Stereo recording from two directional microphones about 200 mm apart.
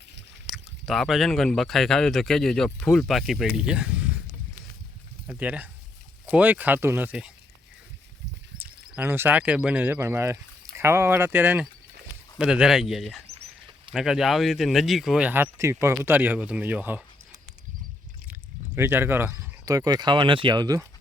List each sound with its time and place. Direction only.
0.5 s speech: centre (ahead or behind)
5.3 s speech: 10° right (ahead or behind)
8.5 s speech: 10° right (ahead or behind)
13.2 s a sound: 30° right (ahead or behind)
13.9 s speech: centre (ahead or behind)
18.8 s speech: 10° right (ahead or behind)